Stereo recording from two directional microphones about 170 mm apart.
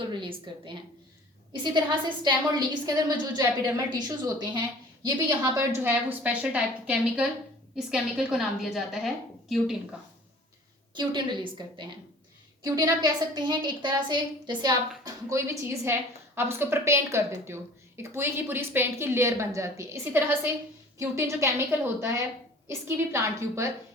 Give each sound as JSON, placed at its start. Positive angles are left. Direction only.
{"t": 0.1, "sound": "a woman's voice", "side_deg": -30}
{"t": 10.9, "sound": "a woman's voice", "side_deg": -25}
{"t": 22.6, "sound": "a woman's voice", "side_deg": -15}